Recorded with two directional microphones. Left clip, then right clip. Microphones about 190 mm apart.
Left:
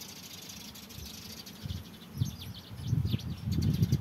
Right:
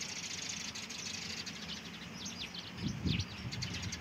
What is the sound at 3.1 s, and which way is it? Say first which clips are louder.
Bird: left 1 dB; 55° left (ahead or behind).